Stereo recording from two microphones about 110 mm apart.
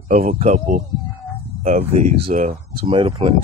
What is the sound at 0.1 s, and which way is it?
Speech, 85° right.